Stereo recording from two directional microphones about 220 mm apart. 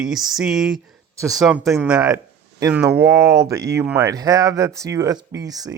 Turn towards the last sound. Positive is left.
turn(degrees=-15)  # may be behind; listen again after turning